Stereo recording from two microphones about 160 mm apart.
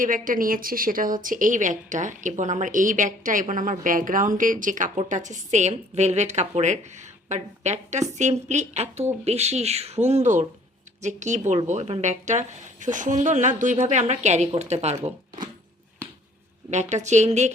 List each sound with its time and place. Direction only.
0.0 s a woman's voice: 55° right (ahead or behind)
16.6 s a woman's voice: 45° right (ahead or behind)